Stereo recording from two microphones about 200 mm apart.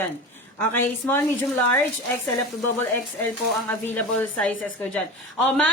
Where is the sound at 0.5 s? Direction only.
10° left (ahead or behind).